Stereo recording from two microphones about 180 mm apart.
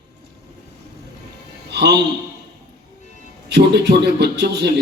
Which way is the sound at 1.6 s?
70° right (ahead or behind).